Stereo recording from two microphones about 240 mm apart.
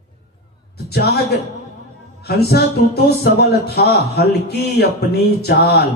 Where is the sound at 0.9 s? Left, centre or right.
Left.